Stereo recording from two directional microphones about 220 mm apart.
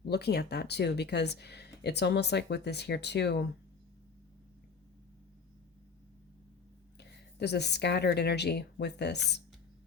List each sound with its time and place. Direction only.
0.1 s speech: 45° left (ahead or behind)
7.3 s speech: 50° left (ahead or behind)